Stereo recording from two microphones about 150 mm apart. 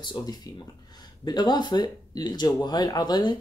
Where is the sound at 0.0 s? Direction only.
30° left (ahead or behind).